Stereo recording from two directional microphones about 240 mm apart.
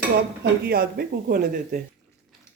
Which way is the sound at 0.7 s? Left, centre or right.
Right.